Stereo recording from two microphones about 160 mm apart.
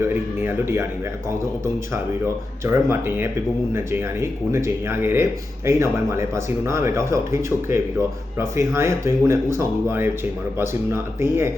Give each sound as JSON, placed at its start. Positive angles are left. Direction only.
{"t": 0.4, "sound": "speech", "side_deg": -15}
{"t": 2.6, "sound": "speech", "side_deg": -15}